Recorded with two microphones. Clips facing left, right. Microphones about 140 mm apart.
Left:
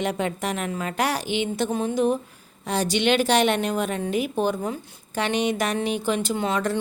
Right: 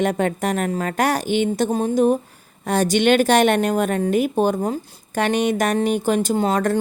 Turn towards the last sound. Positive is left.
turn(degrees=-45)  # may be behind; listen again after turning